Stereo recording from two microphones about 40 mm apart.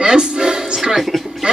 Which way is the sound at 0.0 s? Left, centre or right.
Right.